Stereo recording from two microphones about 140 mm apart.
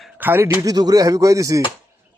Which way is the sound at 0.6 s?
25° right (ahead or behind).